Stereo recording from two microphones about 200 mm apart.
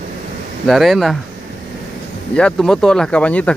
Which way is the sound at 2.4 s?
5° left (ahead or behind).